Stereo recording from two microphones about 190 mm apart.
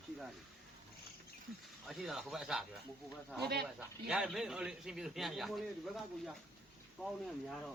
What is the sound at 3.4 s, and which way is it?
Speech, 55° right (ahead or behind).